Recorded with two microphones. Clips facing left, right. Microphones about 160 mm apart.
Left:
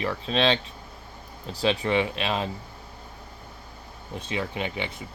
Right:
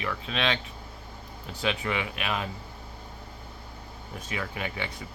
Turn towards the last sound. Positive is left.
turn(degrees=20)  # may be behind; listen again after turning